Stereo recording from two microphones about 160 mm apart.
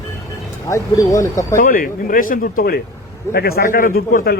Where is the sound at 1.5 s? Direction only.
60° left (ahead or behind).